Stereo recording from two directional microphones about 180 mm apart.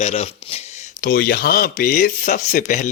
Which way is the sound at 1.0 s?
55° left (ahead or behind).